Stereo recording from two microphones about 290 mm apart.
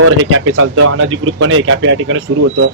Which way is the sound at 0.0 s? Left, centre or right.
Right.